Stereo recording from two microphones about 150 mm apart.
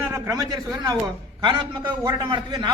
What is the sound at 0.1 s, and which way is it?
A man's voice, 20° right (ahead or behind).